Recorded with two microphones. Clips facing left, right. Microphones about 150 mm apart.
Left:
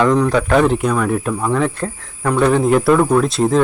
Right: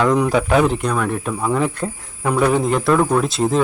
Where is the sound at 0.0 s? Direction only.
5° right (ahead or behind).